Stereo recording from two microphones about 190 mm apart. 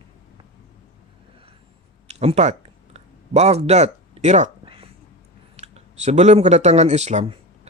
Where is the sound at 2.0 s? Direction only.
35° right (ahead or behind).